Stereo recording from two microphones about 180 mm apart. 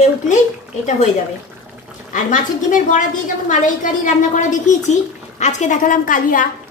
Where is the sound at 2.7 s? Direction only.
45° left (ahead or behind).